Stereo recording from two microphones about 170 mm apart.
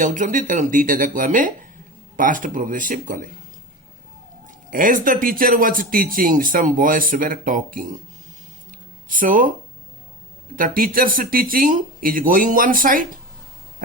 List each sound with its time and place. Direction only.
0.0 s a man's voice: 50° right (ahead or behind)
4.4 s a man's voice: 55° right (ahead or behind)
9.0 s a man's voice: 50° right (ahead or behind)